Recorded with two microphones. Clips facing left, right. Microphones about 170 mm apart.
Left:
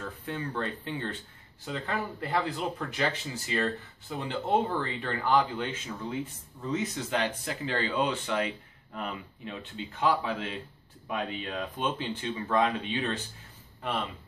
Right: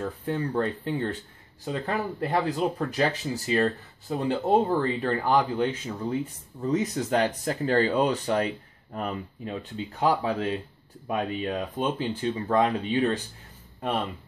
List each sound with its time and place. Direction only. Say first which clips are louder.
0.2 s speech: right 6 dB; 40° right (ahead or behind)